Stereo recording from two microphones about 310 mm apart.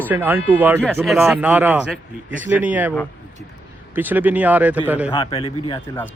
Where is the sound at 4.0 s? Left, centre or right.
Centre.